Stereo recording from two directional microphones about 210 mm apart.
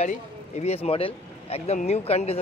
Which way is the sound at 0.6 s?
30° left (ahead or behind).